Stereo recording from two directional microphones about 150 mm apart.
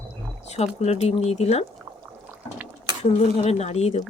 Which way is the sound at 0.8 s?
45° left (ahead or behind).